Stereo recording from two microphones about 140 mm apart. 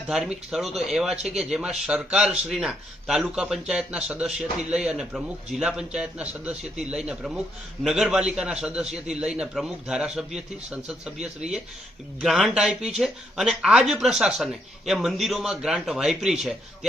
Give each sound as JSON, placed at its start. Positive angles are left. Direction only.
{"t": 0.1, "sound": "a man's voice", "side_deg": -5}